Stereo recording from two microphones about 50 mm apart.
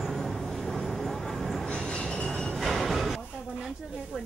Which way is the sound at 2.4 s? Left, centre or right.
Centre.